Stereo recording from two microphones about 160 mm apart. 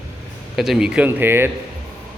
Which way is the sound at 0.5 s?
Centre (ahead or behind).